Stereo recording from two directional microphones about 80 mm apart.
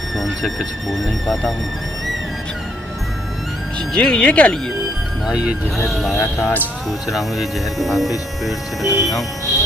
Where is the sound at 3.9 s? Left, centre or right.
Centre.